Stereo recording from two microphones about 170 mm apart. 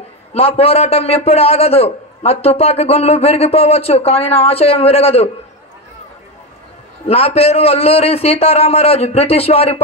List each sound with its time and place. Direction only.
0.3 s a man's voice: 35° left (ahead or behind)
7.1 s a man's voice: 35° left (ahead or behind)